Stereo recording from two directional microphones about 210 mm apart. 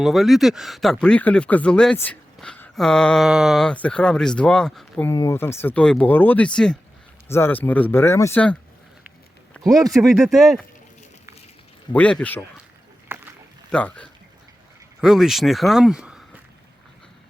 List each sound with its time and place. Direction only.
0.0 s speech: centre (ahead or behind)
5.0 s speech: 15° left (ahead or behind)
9.6 s speech: 15° right (ahead or behind)
9.9 s speech: centre (ahead or behind)
11.9 s speech: 5° left (ahead or behind)
13.1 s a sound: 10° right (ahead or behind)
13.7 s speech: 5° left (ahead or behind)